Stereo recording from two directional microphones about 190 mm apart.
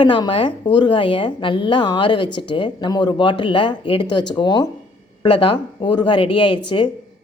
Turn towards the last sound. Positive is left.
turn(degrees=25)  # may be behind; listen again after turning